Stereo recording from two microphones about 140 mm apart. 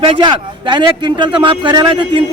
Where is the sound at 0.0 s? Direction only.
35° right (ahead or behind).